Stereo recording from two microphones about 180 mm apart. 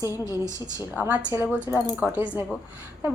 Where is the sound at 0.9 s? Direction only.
10° right (ahead or behind).